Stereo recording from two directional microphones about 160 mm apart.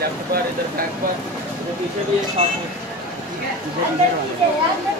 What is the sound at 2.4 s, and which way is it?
Speech, 35° right (ahead or behind).